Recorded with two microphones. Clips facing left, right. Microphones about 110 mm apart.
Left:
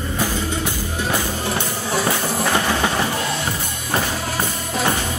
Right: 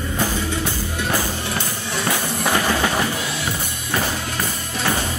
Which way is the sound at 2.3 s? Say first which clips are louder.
Right 1 dB; 20° left (ahead or behind).